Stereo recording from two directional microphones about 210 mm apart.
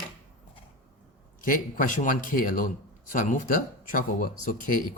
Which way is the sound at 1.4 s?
40° left (ahead or behind).